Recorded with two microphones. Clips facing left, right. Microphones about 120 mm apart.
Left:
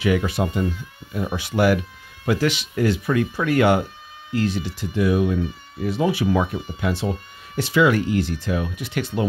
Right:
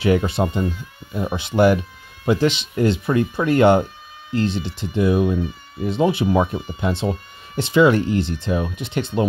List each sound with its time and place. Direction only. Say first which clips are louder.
0.0 s speech: right 3 dB; 30° right (ahead or behind)